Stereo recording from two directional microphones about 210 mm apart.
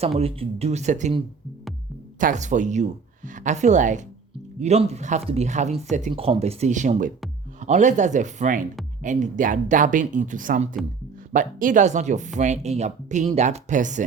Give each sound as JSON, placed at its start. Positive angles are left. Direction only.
{"t": 0.0, "sound": "a woman's voice", "side_deg": -30}